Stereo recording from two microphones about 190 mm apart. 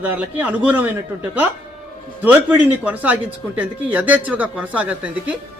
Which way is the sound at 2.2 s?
10° right (ahead or behind).